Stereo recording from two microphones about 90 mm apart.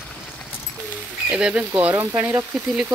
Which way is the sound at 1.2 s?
10° right (ahead or behind).